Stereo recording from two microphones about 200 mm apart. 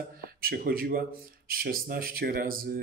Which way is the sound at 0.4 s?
50° right (ahead or behind).